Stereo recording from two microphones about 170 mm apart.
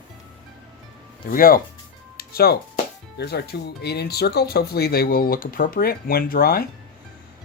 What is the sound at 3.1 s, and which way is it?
Speech, 75° left (ahead or behind).